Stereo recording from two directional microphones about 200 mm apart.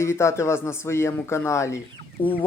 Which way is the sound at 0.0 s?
15° left (ahead or behind).